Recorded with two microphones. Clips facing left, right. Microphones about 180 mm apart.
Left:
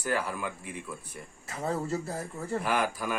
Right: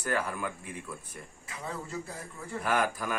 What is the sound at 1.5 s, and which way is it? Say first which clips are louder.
Speech: left 8 dB; 40° left (ahead or behind).